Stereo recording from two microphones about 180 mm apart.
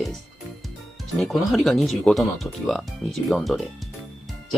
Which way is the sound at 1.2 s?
Centre (ahead or behind).